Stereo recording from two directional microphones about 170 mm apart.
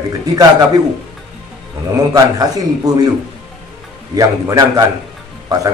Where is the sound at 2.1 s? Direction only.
20° right (ahead or behind).